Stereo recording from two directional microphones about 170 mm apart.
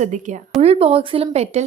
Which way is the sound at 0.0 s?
45° right (ahead or behind).